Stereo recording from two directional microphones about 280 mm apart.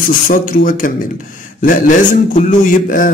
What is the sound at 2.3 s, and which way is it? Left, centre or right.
Speech, left.